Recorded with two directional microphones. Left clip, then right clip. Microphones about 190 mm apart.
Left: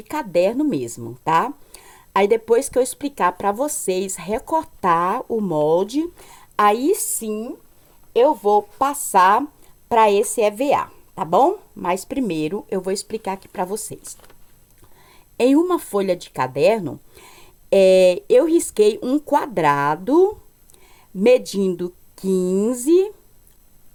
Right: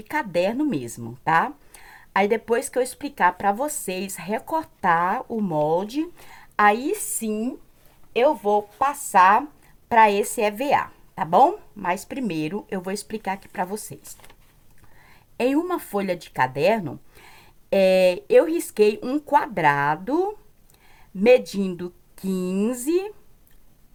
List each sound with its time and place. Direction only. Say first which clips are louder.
0.0 s speech: left 4 dB; 35° left (ahead or behind)
8.1 s speech: left 4 dB; 55° left (ahead or behind)
10.1 s speech: left 5 dB; 30° left (ahead or behind)